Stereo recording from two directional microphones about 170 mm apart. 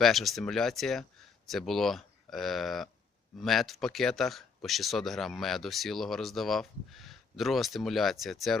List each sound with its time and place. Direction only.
0.0 s speech: centre (ahead or behind)